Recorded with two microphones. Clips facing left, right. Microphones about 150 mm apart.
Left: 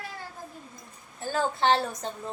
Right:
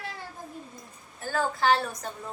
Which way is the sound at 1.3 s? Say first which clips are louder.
Even; 25° left (ahead or behind).